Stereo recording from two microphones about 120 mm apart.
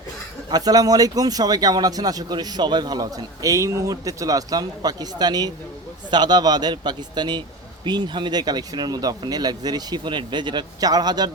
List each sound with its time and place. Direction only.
0.5 s speech: 30° right (ahead or behind)